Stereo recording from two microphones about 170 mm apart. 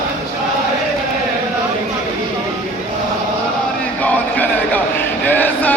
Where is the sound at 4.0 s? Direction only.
10° left (ahead or behind).